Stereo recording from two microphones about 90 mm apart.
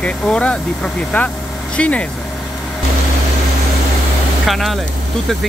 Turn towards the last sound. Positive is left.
turn(degrees=0)  # may be behind; listen again after turning